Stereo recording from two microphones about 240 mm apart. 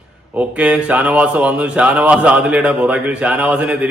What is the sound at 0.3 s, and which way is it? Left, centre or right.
Speech, centre.